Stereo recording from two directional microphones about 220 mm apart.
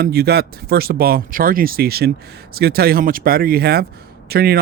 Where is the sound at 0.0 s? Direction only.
45° right (ahead or behind).